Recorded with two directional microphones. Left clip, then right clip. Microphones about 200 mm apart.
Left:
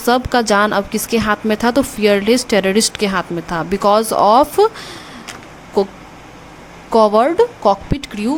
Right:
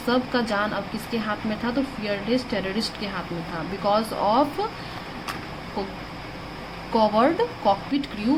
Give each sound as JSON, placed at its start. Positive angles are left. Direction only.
{"t": 0.1, "sound": "speech", "side_deg": 50}
{"t": 6.9, "sound": "speech", "side_deg": 45}